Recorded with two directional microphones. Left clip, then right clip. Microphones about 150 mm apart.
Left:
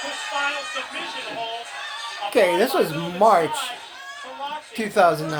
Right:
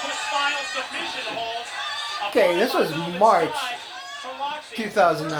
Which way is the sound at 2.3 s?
45° left (ahead or behind).